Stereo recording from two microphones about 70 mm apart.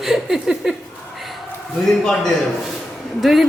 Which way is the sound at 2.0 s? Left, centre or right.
Centre.